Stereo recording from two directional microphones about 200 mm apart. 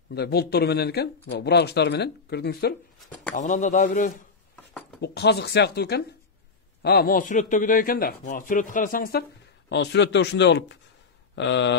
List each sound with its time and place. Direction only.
0.1 s speech: 55° left (ahead or behind)
3.3 s a man's voice: 35° left (ahead or behind)
5.0 s a man's voice: 55° left (ahead or behind)
9.7 s speech: 60° left (ahead or behind)